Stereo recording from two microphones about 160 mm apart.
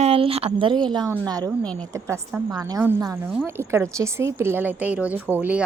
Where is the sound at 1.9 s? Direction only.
15° right (ahead or behind).